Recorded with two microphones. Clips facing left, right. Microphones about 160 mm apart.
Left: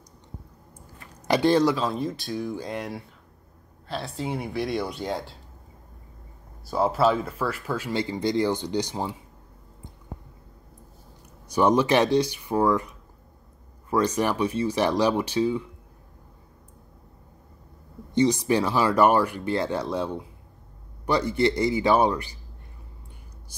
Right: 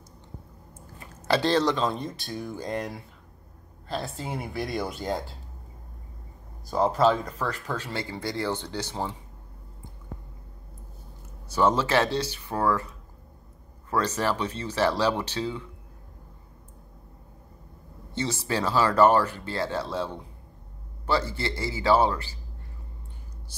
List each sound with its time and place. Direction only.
1.2 s speech: 15° left (ahead or behind)
6.6 s speech: 5° left (ahead or behind)
11.4 s speech: 15° left (ahead or behind)
18.1 s speech: 15° left (ahead or behind)